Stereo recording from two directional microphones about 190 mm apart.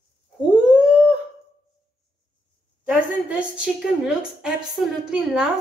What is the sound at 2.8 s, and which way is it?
A woman's voice, 5° right (ahead or behind).